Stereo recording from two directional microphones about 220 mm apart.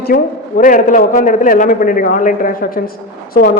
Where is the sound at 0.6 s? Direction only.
35° left (ahead or behind).